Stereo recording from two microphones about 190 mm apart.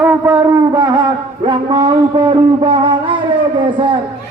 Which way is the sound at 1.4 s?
25° right (ahead or behind).